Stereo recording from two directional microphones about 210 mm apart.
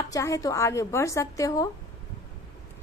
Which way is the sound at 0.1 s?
15° left (ahead or behind).